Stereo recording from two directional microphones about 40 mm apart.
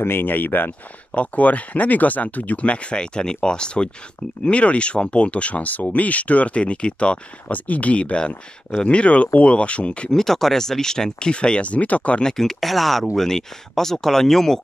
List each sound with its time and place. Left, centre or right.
0.0 s speech: left
1.1 s speech: left
7.5 s speech: left
10.1 s speech: centre; by 12.2 s left
12.2 s speech: centre